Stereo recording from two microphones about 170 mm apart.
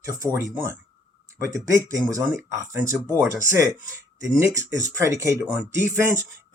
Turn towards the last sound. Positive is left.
turn(degrees=-15)  # may be behind; listen again after turning